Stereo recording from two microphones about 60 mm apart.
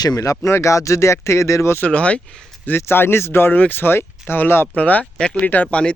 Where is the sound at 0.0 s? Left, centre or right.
Left.